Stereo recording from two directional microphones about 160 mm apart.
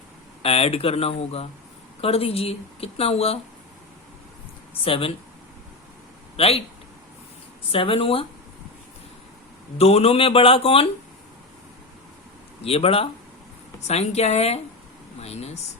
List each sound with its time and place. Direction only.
0.4 s speech: 40° left (ahead or behind)
4.8 s speech: 35° left (ahead or behind)
6.3 s a man's voice: 40° left (ahead or behind)
7.7 s speech: 35° left (ahead or behind)
9.7 s speech: 40° left (ahead or behind)
12.6 s a woman's voice: 40° left (ahead or behind)